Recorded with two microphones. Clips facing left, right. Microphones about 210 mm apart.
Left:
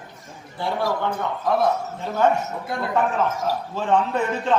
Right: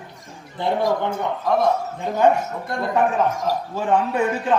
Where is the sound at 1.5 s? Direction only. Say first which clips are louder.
Right 1 dB; 5° left (ahead or behind).